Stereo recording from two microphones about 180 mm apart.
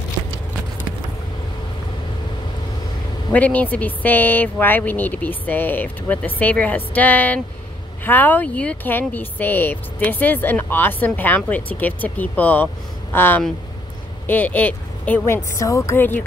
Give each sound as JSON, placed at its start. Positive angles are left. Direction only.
{"t": 3.3, "sound": "speech", "side_deg": 10}